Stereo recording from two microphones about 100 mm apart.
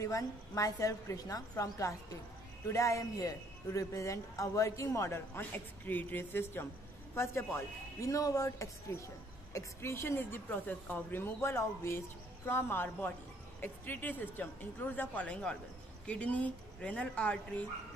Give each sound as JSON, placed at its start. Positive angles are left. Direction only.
{"t": 0.0, "sound": "a man's voice", "side_deg": 35}
{"t": 7.5, "sound": "a woman's voice", "side_deg": 30}